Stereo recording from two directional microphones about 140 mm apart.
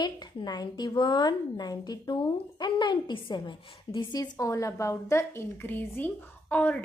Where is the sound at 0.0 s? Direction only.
30° left (ahead or behind).